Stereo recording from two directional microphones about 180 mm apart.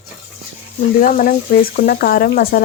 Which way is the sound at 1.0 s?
50° left (ahead or behind).